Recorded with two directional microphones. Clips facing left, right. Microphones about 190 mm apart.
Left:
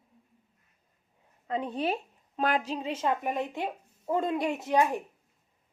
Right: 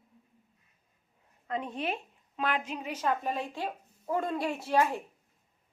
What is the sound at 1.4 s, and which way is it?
A woman's voice, 30° left (ahead or behind).